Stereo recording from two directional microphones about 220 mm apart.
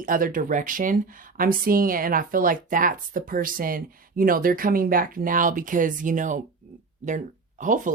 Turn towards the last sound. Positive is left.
turn(degrees=-35)  # may be behind; listen again after turning